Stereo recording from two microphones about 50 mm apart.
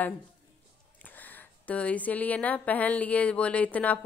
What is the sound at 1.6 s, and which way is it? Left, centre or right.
A woman's voice, left.